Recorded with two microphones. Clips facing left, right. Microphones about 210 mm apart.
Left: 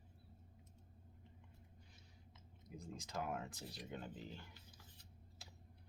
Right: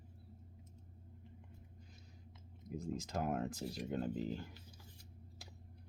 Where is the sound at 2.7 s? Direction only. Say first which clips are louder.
Right 10 dB; 50° right (ahead or behind).